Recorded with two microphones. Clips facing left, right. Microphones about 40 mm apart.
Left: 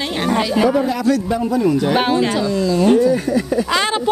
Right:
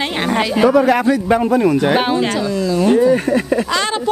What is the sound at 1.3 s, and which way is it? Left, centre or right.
Speech, right.